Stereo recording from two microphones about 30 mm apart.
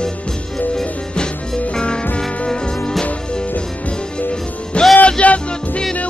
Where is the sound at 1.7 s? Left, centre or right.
Left.